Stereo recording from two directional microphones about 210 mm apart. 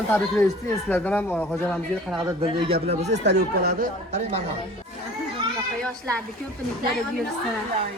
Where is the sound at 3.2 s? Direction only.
50° right (ahead or behind).